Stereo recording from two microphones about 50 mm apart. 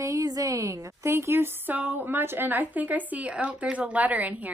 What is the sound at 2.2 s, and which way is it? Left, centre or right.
Speech, right.